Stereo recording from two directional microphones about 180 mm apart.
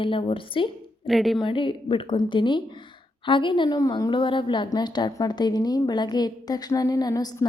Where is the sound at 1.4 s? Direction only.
30° left (ahead or behind).